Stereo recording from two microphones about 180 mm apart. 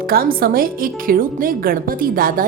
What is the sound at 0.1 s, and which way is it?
A woman's voice, 55° right (ahead or behind).